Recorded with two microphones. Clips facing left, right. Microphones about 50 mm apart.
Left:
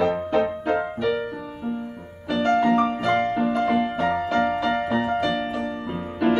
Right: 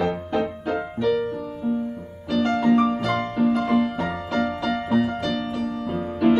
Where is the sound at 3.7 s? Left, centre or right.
Left.